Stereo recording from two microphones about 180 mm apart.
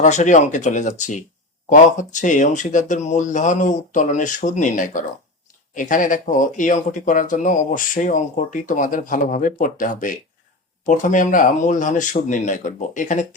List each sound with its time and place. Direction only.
0.0 s speech: 40° left (ahead or behind)